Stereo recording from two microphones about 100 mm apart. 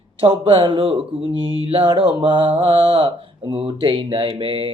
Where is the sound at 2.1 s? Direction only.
55° right (ahead or behind).